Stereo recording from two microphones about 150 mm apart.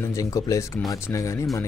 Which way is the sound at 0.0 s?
20° left (ahead or behind).